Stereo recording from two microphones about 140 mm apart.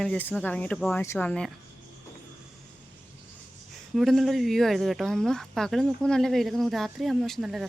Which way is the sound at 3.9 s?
Centre (ahead or behind).